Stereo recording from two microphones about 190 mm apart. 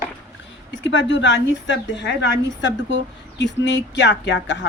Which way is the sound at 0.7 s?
75° left (ahead or behind).